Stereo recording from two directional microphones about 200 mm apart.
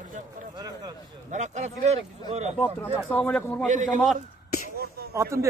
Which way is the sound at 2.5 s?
5° left (ahead or behind).